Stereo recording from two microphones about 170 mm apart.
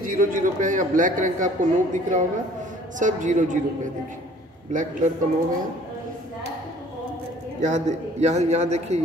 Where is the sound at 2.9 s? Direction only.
50° right (ahead or behind).